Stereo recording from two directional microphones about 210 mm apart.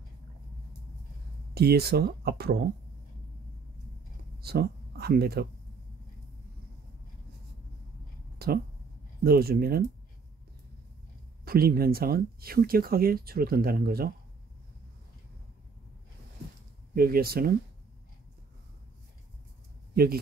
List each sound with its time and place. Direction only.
1.5 s speech: 50° right (ahead or behind)
4.4 s speech: 50° right (ahead or behind)
8.4 s speech: 50° right (ahead or behind)
11.4 s speech: 45° right (ahead or behind)
16.9 s speech: 45° right (ahead or behind)